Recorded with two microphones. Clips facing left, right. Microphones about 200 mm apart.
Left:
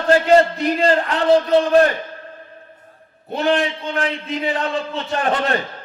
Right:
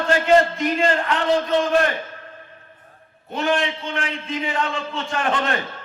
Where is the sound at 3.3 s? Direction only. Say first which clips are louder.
Left 3 dB; 35° left (ahead or behind).